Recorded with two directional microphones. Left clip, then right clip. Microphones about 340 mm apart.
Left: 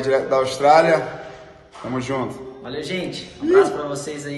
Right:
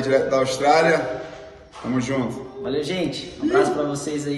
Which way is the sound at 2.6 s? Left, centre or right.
Centre.